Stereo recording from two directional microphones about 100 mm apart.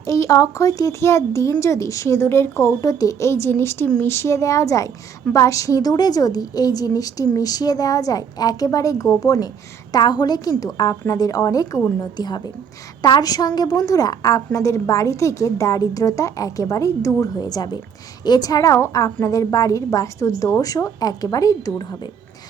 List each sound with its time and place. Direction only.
0.0 s a woman's voice: 30° left (ahead or behind)